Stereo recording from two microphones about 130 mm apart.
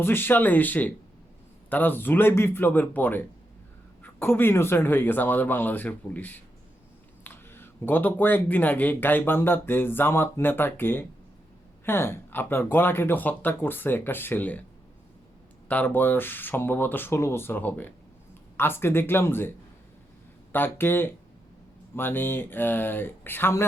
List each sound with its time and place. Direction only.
0.0 s speech: 15° left (ahead or behind)
15.7 s speech: 15° left (ahead or behind)